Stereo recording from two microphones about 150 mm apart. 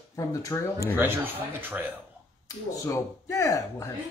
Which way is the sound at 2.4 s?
20° left (ahead or behind).